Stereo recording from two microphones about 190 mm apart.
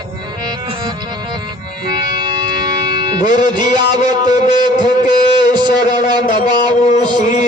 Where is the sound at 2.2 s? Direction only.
20° right (ahead or behind).